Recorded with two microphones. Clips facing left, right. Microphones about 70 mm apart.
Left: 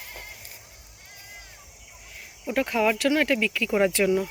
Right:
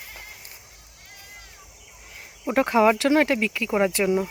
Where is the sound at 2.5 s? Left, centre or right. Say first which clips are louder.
Right 5 dB; right.